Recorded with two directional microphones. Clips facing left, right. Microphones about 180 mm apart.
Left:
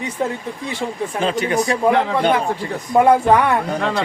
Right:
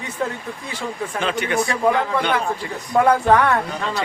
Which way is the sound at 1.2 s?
35° left (ahead or behind).